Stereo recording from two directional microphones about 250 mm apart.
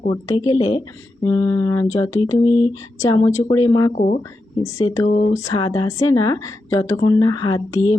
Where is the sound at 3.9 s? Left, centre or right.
Left.